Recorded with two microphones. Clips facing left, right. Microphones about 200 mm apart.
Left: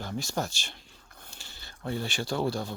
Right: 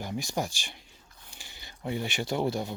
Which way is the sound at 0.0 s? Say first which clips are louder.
Even; 15° right (ahead or behind).